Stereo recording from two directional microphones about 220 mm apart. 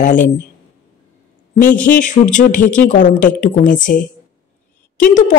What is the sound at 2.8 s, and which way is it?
A woman's voice, 35° left (ahead or behind).